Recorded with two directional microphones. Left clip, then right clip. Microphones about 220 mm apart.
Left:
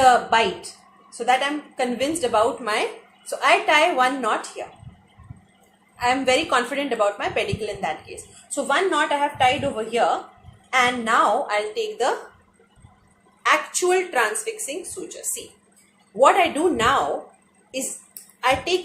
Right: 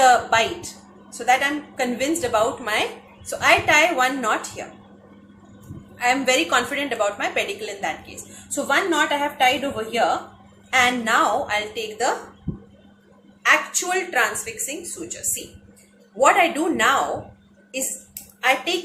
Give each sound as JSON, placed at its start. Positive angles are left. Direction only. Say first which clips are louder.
{"t": 0.0, "sound": "a woman's voice", "louder": "even", "side_deg": 10}
{"t": 6.0, "sound": "a woman's voice", "louder": "right 1 dB", "side_deg": 10}
{"t": 14.1, "sound": "a woman's voice", "louder": "even", "side_deg": 20}
{"t": 16.2, "sound": "a woman's voice", "louder": "even", "side_deg": 20}
{"t": 18.3, "sound": "a woman's voice", "louder": "right 1 dB", "side_deg": 20}